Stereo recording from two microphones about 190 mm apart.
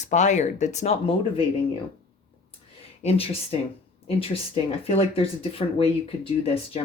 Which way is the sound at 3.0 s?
30° left (ahead or behind).